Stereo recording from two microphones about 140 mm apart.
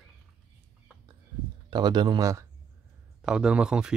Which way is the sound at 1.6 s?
30° right (ahead or behind).